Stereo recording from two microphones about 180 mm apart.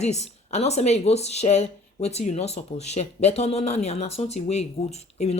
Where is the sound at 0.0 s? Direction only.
40° left (ahead or behind).